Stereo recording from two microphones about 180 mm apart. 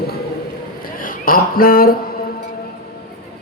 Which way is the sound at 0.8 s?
50° left (ahead or behind).